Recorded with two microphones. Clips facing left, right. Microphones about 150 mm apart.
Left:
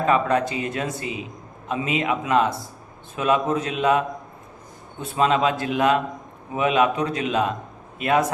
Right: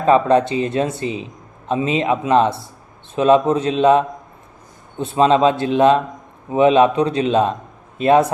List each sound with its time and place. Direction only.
0.0 s a man's voice: 30° right (ahead or behind)